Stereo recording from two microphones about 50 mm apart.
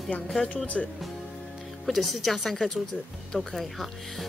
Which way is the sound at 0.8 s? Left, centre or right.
Centre.